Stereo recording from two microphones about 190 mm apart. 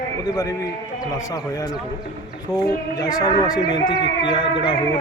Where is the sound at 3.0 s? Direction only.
20° left (ahead or behind).